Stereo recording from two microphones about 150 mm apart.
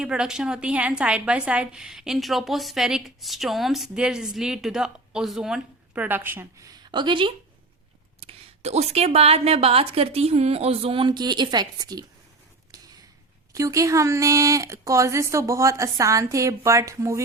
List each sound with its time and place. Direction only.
0.0 s a woman's voice: 5° right (ahead or behind); by 12.0 s 25° right (ahead or behind)
13.5 s speech: 20° right (ahead or behind)